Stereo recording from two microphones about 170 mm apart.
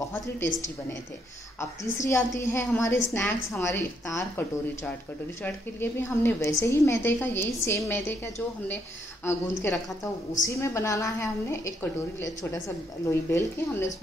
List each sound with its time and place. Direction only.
1.6 s a woman's voice: 15° left (ahead or behind)